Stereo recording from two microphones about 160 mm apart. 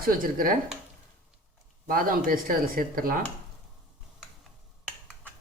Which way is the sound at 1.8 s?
60° right (ahead or behind).